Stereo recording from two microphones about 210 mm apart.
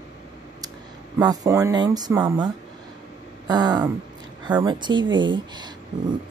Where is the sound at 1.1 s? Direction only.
15° right (ahead or behind).